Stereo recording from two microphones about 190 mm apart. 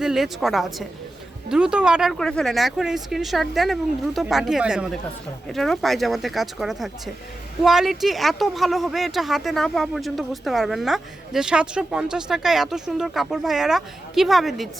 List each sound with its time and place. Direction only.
0.0 s speech: centre (ahead or behind)